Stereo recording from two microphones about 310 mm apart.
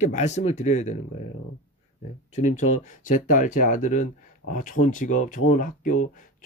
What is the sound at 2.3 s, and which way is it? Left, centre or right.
Speech, left.